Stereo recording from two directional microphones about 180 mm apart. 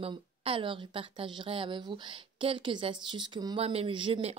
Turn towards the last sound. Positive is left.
turn(degrees=-30)  # may be behind; listen again after turning